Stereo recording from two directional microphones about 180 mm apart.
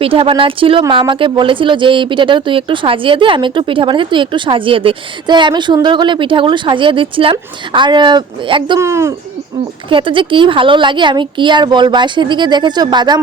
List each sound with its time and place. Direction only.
0.0 s speech: 30° right (ahead or behind)
8.8 s speech: 15° right (ahead or behind)
9.9 s speech: 30° right (ahead or behind)